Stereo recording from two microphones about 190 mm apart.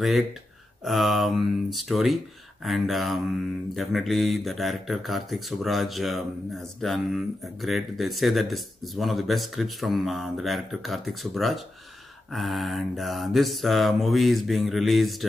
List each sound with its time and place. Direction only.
0.0 s speech: centre (ahead or behind)